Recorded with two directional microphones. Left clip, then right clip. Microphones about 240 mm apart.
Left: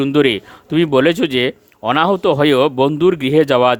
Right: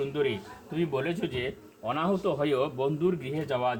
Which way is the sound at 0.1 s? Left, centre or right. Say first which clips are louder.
Left 15 dB; left.